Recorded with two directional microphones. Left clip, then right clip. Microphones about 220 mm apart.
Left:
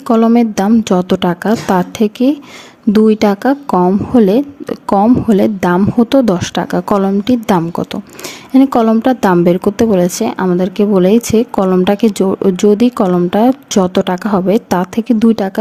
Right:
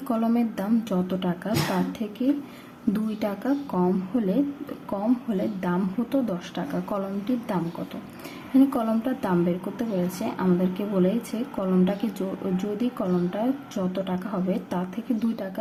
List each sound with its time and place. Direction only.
0.1 s speech: 40° left (ahead or behind)